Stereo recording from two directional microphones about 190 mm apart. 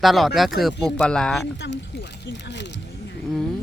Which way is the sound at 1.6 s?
75° left (ahead or behind).